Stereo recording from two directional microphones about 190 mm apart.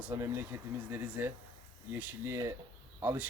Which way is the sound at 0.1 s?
15° right (ahead or behind).